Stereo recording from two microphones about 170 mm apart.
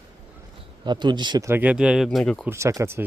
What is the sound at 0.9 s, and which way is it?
Speech, 25° right (ahead or behind).